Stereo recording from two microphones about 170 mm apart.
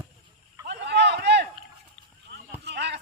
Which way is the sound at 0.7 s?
80° right.